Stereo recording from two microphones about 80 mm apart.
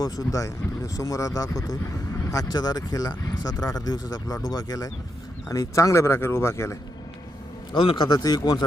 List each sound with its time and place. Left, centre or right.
0.0 s speech: left
7.7 s a man's voice: left
8.1 s speech: left